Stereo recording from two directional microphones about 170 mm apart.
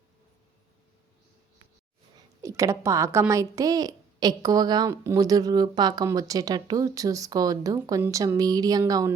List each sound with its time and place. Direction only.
2.4 s a woman's voice: 20° right (ahead or behind)